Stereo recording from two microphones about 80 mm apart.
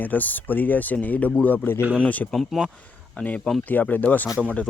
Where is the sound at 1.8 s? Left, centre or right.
Centre.